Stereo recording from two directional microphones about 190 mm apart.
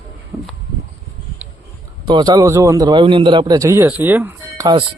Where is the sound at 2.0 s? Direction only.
20° right (ahead or behind).